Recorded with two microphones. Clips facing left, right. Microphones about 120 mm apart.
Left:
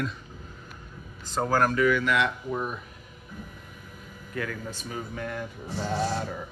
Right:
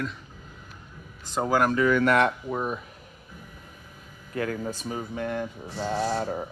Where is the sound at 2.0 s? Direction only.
45° right (ahead or behind).